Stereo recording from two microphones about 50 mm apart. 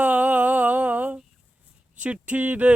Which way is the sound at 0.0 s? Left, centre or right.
Right.